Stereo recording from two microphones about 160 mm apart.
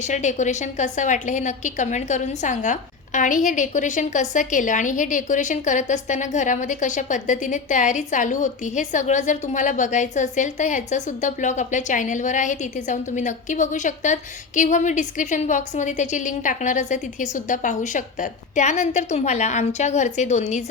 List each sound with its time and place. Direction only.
0.0 s a woman's voice: 50° left (ahead or behind)